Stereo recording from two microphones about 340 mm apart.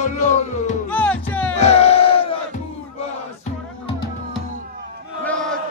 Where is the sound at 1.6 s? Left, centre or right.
Centre.